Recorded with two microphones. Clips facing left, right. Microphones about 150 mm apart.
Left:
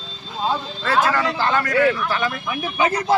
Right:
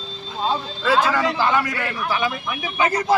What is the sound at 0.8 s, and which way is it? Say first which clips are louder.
Speech: right 1 dB; 10° right (ahead or behind).